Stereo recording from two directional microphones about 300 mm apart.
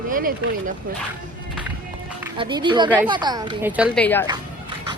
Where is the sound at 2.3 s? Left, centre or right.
Centre.